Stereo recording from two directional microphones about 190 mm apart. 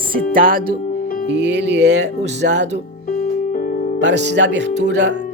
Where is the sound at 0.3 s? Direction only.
50° right (ahead or behind).